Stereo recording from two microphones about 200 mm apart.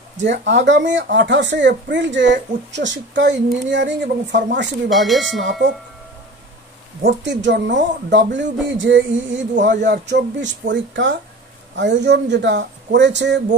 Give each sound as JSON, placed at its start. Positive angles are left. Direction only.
{"t": 0.2, "sound": "speech", "side_deg": -65}
{"t": 4.8, "sound": "speech", "side_deg": 0}
{"t": 5.4, "sound": "speech", "side_deg": -65}
{"t": 7.0, "sound": "speech", "side_deg": -60}